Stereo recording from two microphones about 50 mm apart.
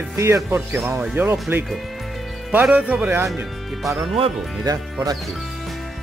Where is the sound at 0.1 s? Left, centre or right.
Right.